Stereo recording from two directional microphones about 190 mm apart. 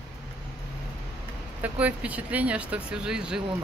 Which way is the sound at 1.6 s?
10° right (ahead or behind).